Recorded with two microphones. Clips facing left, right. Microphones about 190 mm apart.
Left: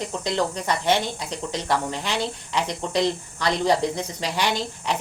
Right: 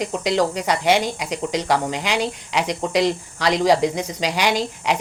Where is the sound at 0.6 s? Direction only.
90° right.